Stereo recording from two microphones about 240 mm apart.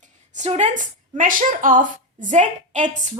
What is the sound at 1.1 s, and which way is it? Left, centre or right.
A woman's voice, right.